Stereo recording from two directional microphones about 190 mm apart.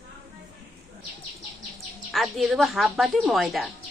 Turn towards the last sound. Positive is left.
turn(degrees=0)  # may be behind; listen again after turning